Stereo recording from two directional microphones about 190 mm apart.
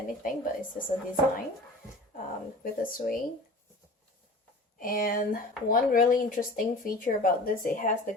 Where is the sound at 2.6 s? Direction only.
50° left (ahead or behind).